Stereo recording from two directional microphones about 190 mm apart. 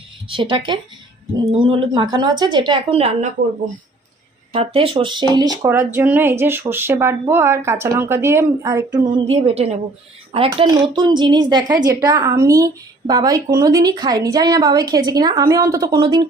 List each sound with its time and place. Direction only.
0.3 s a woman's voice: 25° right (ahead or behind)
4.5 s a woman's voice: 30° right (ahead or behind)